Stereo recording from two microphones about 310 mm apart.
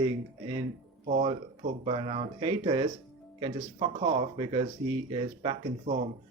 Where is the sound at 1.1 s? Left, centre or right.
Right.